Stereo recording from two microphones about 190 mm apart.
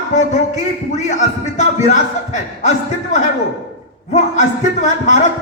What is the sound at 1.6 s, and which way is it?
Music, 35° left (ahead or behind).